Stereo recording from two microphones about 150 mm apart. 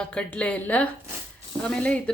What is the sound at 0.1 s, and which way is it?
A woman's voice, 5° left (ahead or behind).